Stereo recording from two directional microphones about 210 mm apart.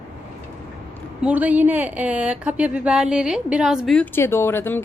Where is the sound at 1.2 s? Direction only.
5° right (ahead or behind).